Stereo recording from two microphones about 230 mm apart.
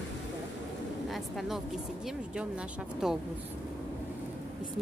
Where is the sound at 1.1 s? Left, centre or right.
Centre.